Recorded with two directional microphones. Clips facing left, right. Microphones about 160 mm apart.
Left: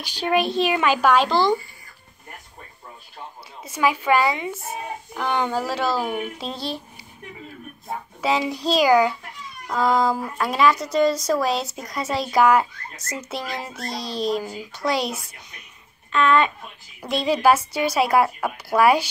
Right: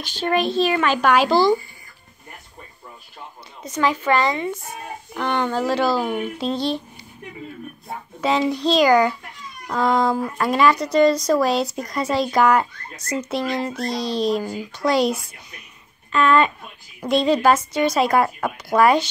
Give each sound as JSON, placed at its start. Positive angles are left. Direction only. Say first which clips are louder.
{"t": 0.0, "sound": "speech", "louder": "right 1 dB", "side_deg": 10}
{"t": 1.1, "sound": "speech", "louder": "right 2 dB", "side_deg": -10}
{"t": 3.6, "sound": "speech", "louder": "right 1 dB", "side_deg": 10}
{"t": 8.2, "sound": "speech", "louder": "right 3 dB", "side_deg": 5}